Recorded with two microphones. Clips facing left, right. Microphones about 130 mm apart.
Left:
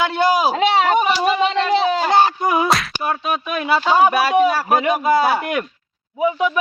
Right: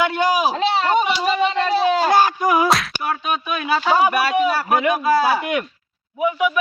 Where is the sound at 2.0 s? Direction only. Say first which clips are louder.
Even; 25° left (ahead or behind).